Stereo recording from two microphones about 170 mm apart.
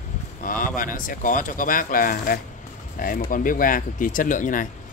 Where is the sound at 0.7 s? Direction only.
55° left (ahead or behind).